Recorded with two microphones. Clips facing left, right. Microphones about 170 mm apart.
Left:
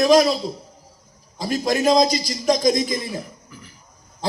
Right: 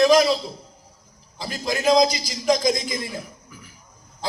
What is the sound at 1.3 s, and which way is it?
A man's voice, 45° left (ahead or behind).